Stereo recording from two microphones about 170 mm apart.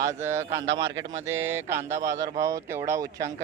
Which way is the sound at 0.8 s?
90° right.